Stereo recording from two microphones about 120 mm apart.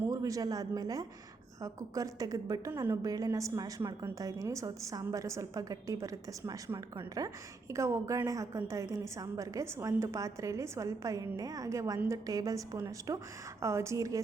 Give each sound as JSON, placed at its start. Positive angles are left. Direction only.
{"t": 0.1, "sound": "a woman's voice", "side_deg": -30}